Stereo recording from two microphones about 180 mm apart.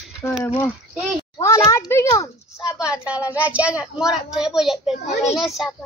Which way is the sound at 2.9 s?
5° right (ahead or behind).